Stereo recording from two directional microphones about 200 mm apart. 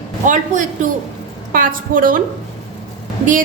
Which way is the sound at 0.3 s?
40° right (ahead or behind).